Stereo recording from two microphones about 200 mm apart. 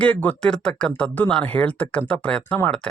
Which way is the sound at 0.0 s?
5° left (ahead or behind).